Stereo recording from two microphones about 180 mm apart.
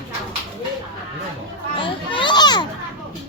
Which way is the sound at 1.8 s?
25° left (ahead or behind).